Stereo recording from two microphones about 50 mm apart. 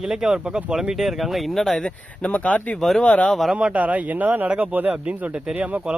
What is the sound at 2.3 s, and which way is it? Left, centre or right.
Speech, left.